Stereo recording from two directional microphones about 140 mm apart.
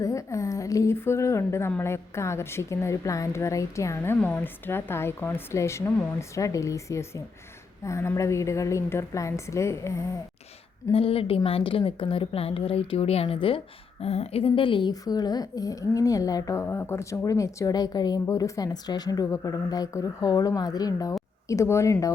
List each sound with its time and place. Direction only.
0.0 s a woman's voice: 20° left (ahead or behind)
10.9 s a woman's voice: 40° left (ahead or behind); by 21.9 s 20° left (ahead or behind)